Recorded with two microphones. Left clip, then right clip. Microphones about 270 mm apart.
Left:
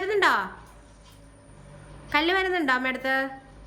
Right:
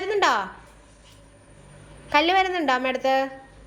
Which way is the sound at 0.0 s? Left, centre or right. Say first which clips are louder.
Right 1 dB; centre.